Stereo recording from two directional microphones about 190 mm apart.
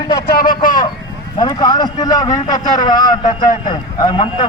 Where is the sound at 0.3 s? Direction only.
50° left (ahead or behind).